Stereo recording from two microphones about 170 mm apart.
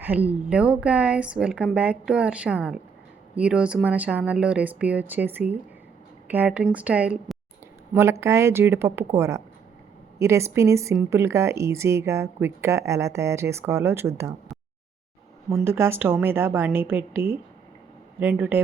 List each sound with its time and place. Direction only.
0.0 s speech: 10° right (ahead or behind)
15.5 s speech: 15° right (ahead or behind)